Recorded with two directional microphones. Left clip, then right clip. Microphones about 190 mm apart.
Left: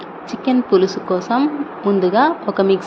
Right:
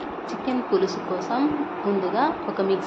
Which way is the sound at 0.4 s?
40° left (ahead or behind).